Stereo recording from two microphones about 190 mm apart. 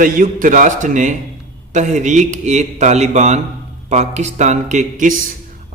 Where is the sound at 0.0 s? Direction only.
45° right (ahead or behind).